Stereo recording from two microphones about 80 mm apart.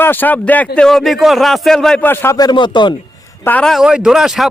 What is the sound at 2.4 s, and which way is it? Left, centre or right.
Speech, left.